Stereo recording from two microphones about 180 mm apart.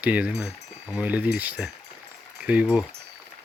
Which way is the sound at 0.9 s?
10° right (ahead or behind).